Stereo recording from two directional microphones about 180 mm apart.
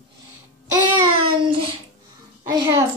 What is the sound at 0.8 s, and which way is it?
Child singing, 30° right (ahead or behind).